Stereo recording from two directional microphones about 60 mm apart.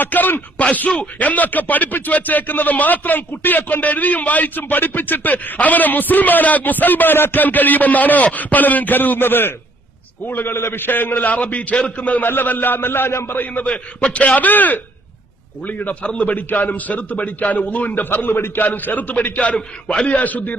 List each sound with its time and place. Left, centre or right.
0.0 s a man's voice: left
20.1 s speech: left